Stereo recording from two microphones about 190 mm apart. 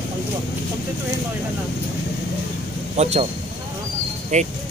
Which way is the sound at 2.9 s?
35° right (ahead or behind).